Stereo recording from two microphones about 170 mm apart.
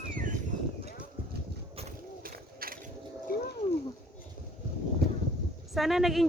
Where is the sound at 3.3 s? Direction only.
60° left (ahead or behind).